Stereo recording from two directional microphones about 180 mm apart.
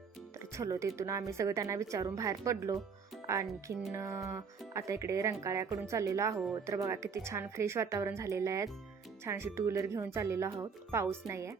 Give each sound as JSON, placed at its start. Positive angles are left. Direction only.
{"t": 0.3, "sound": "speech", "side_deg": -15}